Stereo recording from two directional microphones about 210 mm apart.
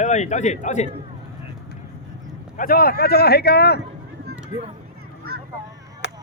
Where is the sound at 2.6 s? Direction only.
45° left (ahead or behind).